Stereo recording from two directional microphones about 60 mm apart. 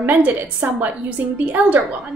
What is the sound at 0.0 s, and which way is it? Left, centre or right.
Speech, right.